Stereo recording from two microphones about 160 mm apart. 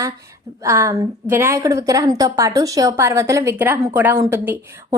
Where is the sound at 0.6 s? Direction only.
20° right (ahead or behind).